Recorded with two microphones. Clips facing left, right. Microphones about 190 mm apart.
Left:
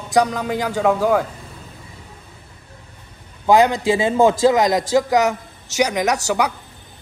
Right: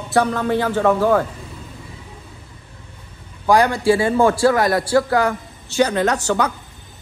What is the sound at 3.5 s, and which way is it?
Speech, 20° left (ahead or behind).